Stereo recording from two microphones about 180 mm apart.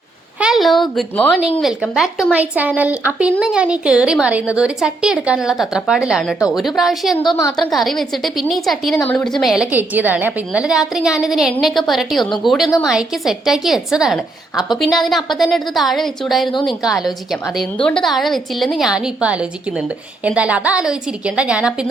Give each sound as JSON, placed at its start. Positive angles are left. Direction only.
{"t": 0.3, "sound": "a woman's voice", "side_deg": -5}
{"t": 7.2, "sound": "a woman's voice", "side_deg": 20}
{"t": 7.5, "sound": "a woman's voice", "side_deg": 0}